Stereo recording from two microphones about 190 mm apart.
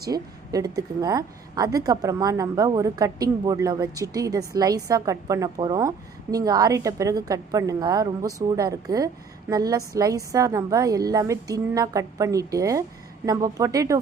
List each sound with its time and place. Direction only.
0.1 s a woman's voice: 20° right (ahead or behind)